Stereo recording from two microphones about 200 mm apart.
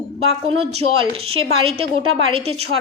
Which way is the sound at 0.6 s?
30° right (ahead or behind).